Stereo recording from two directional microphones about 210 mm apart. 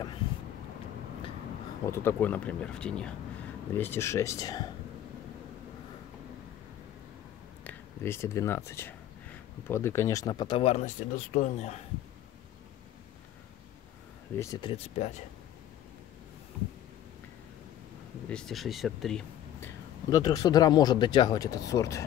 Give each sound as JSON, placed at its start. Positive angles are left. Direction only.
{"t": 1.9, "sound": "speech", "side_deg": 10}
{"t": 7.6, "sound": "speech", "side_deg": 10}
{"t": 14.3, "sound": "speech", "side_deg": 15}
{"t": 18.3, "sound": "speech", "side_deg": 0}
{"t": 20.1, "sound": "speech", "side_deg": 15}